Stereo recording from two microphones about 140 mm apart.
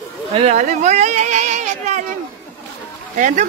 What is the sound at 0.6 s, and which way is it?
Speech, 55° right (ahead or behind).